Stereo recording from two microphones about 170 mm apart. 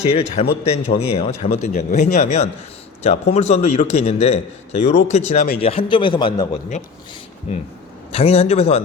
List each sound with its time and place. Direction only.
0.1 s a man's voice: 35° left (ahead or behind)
8.1 s a man's voice: 35° left (ahead or behind)